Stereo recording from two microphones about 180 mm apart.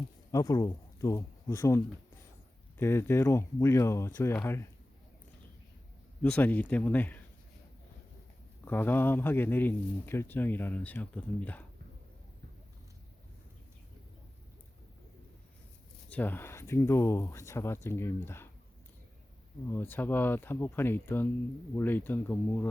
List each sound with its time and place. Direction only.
0.3 s a man's voice: 20° left (ahead or behind)
6.2 s a man's voice: 10° left (ahead or behind)
8.6 s a man's voice: 10° left (ahead or behind)
16.0 s a man's voice: 10° left (ahead or behind)
19.7 s a man's voice: 10° left (ahead or behind)